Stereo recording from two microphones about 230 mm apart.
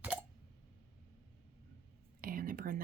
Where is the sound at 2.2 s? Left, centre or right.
Right.